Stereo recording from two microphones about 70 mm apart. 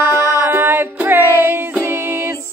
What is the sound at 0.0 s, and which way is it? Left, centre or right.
Music, right.